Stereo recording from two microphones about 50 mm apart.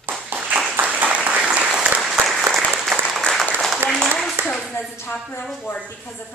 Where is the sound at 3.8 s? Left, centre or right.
Right.